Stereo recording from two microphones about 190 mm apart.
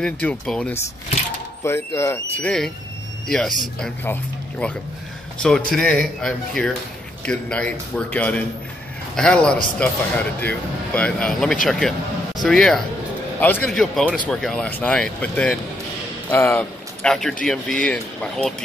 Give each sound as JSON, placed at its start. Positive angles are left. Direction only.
{"t": 0.0, "sound": "speech", "side_deg": 5}